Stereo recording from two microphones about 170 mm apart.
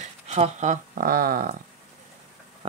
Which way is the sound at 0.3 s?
40° right (ahead or behind).